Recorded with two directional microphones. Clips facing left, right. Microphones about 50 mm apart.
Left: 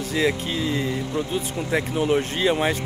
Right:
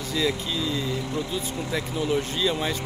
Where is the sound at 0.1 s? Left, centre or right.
Left.